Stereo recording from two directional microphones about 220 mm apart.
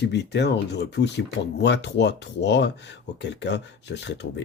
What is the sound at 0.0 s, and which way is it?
Speech, 50° left (ahead or behind).